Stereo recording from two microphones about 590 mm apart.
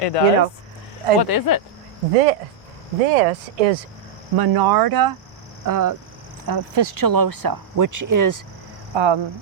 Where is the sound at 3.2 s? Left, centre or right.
Right.